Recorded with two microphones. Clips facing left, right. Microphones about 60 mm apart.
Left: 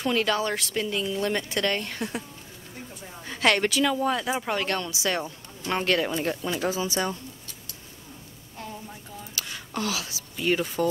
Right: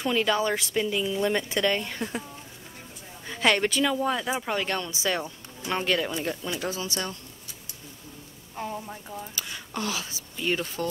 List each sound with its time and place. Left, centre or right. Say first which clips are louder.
0.0 s a woman's voice: even; centre
3.3 s a woman's voice: left 1 dB; centre
8.5 s a sound: right 5 dB; right
9.3 s a woman's voice: left 1 dB; centre